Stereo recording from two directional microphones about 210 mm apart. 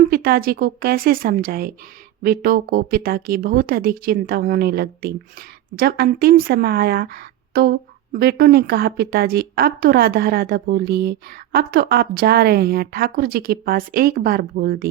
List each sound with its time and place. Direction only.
0.0 s speech: 45° right (ahead or behind)